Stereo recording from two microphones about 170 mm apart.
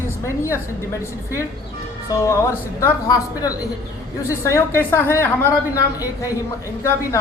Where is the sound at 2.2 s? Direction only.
15° left (ahead or behind).